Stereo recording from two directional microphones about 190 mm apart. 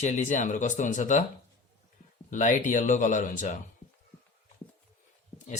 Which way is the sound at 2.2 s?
45° left (ahead or behind).